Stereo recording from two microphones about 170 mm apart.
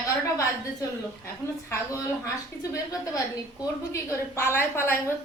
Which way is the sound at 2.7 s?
20° left (ahead or behind).